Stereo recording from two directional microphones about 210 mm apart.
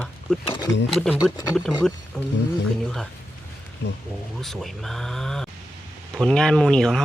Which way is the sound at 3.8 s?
50° left (ahead or behind).